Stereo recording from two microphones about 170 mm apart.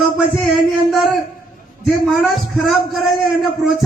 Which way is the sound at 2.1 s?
Centre (ahead or behind).